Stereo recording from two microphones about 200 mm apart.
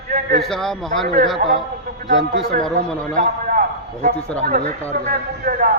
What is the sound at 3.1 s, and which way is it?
A man's voice, 40° right (ahead or behind).